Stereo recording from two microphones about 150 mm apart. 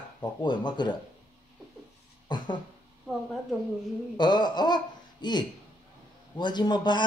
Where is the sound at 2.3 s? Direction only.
30° left (ahead or behind).